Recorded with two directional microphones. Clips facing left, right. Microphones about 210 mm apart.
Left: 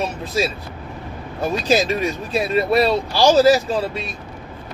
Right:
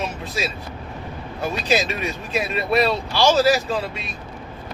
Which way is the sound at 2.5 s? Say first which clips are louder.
Left 4 dB; 35° left (ahead or behind).